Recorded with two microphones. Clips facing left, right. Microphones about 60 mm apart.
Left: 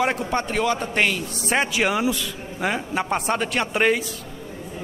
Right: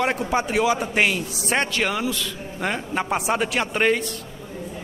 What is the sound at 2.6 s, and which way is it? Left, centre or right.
A man's voice, centre.